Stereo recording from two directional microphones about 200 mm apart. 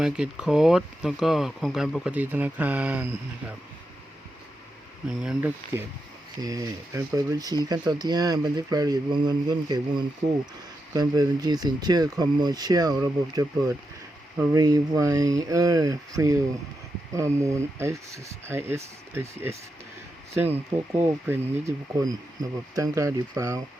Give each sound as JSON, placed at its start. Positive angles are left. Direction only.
{"t": 0.0, "sound": "speech", "side_deg": -5}
{"t": 5.0, "sound": "speech", "side_deg": -5}
{"t": 6.4, "sound": "speech", "side_deg": -15}
{"t": 17.4, "sound": "speech", "side_deg": -15}